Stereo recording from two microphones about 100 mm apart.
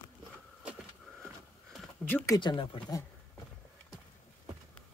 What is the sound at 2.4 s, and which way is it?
Speech, 50° left (ahead or behind).